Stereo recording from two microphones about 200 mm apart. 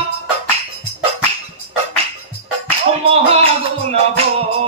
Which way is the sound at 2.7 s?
30° right (ahead or behind).